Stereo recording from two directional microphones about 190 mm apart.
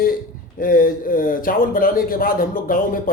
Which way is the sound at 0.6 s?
45° left (ahead or behind).